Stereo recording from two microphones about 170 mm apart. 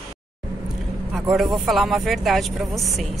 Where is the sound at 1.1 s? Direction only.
Centre (ahead or behind).